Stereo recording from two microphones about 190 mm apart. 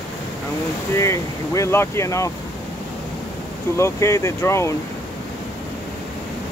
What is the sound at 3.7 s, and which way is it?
Speech, 15° left (ahead or behind).